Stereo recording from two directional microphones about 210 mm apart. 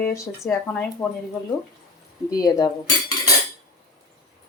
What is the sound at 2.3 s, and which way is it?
Speech, 15° left (ahead or behind).